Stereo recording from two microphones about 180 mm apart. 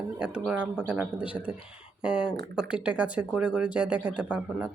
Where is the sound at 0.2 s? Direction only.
5° right (ahead or behind).